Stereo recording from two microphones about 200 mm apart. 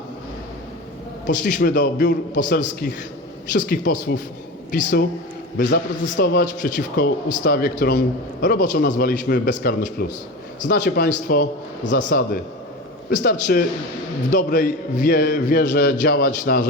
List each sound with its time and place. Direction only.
1.3 s a man's voice: 40° left (ahead or behind)
13.5 s a man's voice: 50° left (ahead or behind)